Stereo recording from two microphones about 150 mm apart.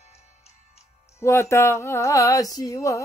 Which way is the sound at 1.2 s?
20° left (ahead or behind).